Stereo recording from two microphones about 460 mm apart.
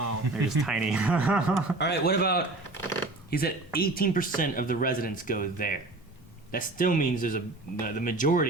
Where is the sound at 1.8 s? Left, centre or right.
Left.